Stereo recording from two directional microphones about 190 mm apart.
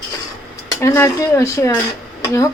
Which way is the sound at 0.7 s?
15° left (ahead or behind).